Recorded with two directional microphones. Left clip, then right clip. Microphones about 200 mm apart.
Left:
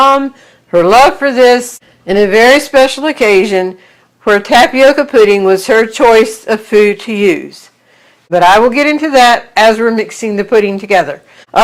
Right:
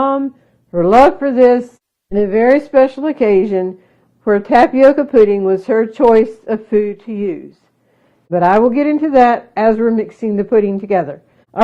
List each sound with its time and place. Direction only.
0.3 s speech: 20° left (ahead or behind)